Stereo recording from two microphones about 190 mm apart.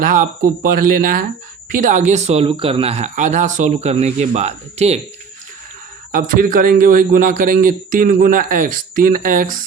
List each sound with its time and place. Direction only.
0.0 s a man's voice: 45° right (ahead or behind)
6.1 s a man's voice: 45° right (ahead or behind)